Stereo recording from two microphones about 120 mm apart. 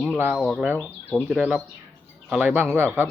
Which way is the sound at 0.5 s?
15° right (ahead or behind).